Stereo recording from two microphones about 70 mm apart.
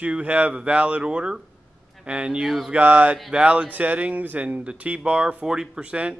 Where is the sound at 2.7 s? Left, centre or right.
Right.